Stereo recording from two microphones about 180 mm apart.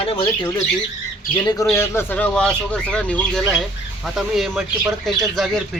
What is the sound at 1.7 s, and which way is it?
Speech, 15° left (ahead or behind).